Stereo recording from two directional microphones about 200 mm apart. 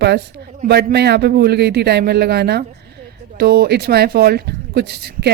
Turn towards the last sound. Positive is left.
turn(degrees=-55)  # may be behind; listen again after turning